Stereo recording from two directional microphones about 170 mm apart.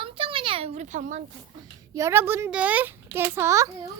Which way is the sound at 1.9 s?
15° right (ahead or behind).